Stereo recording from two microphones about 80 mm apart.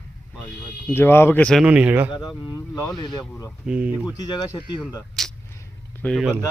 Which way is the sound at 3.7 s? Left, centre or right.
Centre.